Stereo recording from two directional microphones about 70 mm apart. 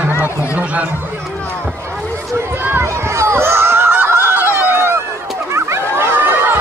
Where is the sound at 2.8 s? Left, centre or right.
Right.